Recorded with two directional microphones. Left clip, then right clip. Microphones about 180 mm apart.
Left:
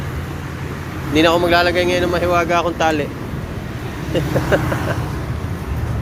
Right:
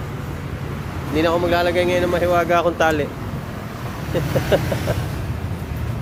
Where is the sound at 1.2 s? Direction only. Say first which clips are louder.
Left 5 dB; 10° right (ahead or behind).